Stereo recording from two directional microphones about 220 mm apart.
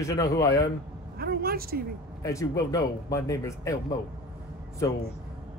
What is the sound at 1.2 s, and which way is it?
Speech, 45° right (ahead or behind).